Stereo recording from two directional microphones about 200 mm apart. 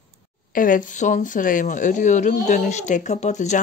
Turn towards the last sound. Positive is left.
turn(degrees=35)  # may be behind; listen again after turning